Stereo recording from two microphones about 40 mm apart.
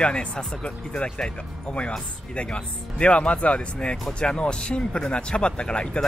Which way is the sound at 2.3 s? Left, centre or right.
Left.